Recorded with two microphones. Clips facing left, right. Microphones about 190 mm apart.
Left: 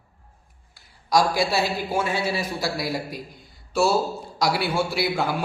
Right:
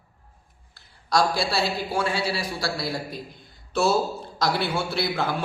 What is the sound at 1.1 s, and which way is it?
A woman's voice, 15° left (ahead or behind).